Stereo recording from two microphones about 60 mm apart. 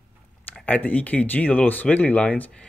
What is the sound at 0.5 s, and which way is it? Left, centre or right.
Speech, left.